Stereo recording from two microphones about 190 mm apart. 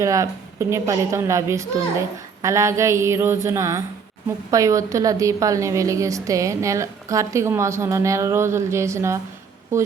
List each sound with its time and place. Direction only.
0.0 s a woman's voice: 15° right (ahead or behind)